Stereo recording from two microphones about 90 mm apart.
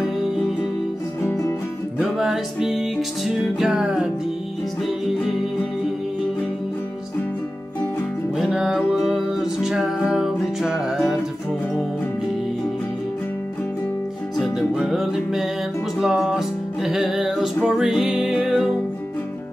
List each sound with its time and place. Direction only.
1.2 s music: 30° left (ahead or behind)
2.0 s music: 5° right (ahead or behind)
8.4 s music: 10° right (ahead or behind)
14.3 s music: centre (ahead or behind)